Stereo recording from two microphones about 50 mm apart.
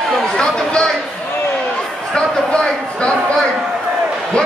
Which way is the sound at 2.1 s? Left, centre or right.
Centre.